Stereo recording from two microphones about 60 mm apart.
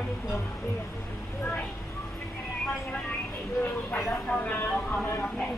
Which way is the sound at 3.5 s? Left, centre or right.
Left.